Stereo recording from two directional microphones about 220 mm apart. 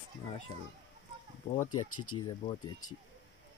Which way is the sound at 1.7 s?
85° left.